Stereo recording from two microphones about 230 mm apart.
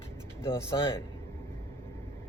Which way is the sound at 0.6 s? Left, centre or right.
Centre.